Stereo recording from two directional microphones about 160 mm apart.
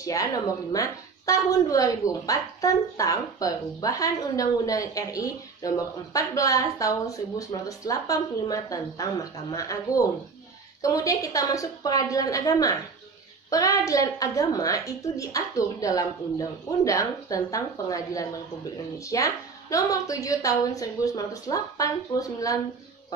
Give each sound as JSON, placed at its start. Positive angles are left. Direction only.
{"t": 0.0, "sound": "speech", "side_deg": 20}